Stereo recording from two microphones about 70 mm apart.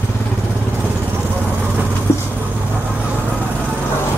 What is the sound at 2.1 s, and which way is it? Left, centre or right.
Vehicle, left.